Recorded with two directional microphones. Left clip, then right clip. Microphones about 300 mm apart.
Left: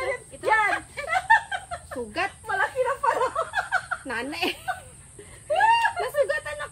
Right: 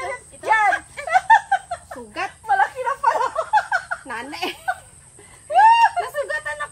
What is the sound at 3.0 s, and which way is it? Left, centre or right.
Laughter, centre.